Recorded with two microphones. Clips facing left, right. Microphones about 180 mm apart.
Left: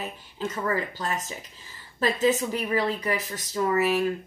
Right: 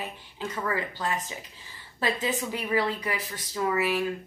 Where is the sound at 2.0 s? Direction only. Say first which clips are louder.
Left 5 dB; 40° left (ahead or behind).